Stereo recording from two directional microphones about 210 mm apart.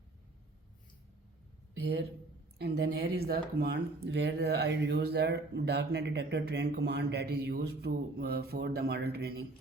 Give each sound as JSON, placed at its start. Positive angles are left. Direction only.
{"t": 1.7, "sound": "speech", "side_deg": -50}